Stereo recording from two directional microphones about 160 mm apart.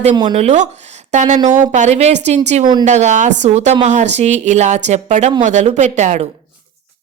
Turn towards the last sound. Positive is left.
turn(degrees=-45)  # may be behind; listen again after turning